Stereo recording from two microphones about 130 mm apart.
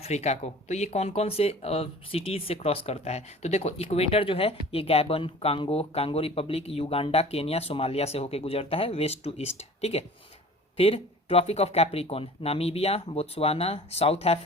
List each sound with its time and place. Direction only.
0.0 s speech: 55° left (ahead or behind)